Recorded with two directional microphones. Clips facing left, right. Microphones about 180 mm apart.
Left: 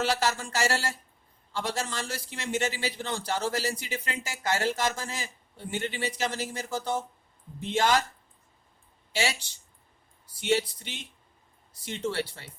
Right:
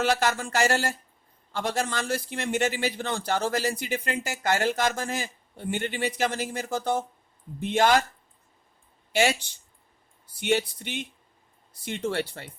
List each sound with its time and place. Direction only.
0.0 s a man's voice: 55° right (ahead or behind)
9.1 s a man's voice: 55° right (ahead or behind)
10.4 s a man's voice: 55° right (ahead or behind)